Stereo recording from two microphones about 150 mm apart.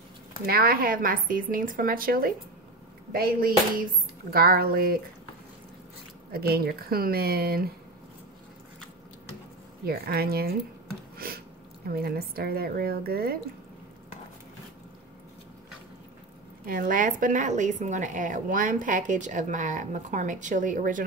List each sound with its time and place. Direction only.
0.5 s speech: 85° right
6.3 s a woman's voice: 90° right
9.8 s a woman's voice: 90° right
11.1 s a sound: 85° right
11.9 s a woman's voice: 90° right
16.6 s a woman's voice: 70° right (ahead or behind)